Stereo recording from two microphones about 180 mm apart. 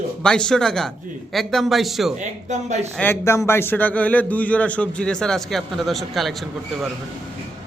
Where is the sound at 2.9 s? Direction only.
10° left (ahead or behind).